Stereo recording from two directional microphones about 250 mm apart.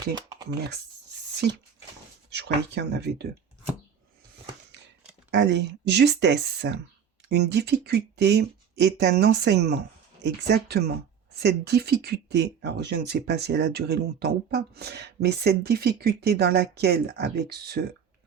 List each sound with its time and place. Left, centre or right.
2.3 s speech: right
5.3 s speech: right